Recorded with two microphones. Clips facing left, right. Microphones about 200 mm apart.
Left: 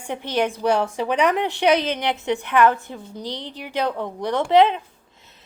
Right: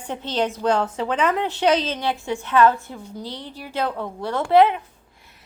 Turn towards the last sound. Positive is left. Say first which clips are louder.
# even
turn(degrees=20)  # may be behind; listen again after turning